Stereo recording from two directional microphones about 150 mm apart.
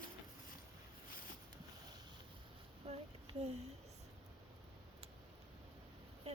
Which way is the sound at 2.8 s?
45° right (ahead or behind).